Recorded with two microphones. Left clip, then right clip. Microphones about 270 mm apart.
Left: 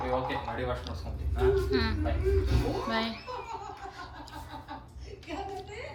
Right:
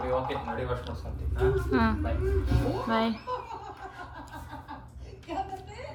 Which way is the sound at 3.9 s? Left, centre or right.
Centre.